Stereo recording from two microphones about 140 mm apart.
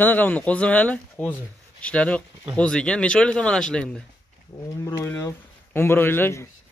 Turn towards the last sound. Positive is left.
turn(degrees=15)  # may be behind; listen again after turning